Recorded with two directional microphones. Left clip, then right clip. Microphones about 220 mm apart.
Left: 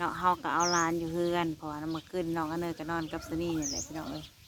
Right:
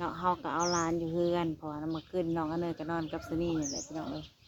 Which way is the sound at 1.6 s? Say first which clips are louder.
Left 1 dB; 15° left (ahead or behind).